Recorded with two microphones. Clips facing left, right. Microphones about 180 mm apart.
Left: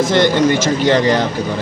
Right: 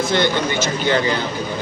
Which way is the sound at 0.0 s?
90° left.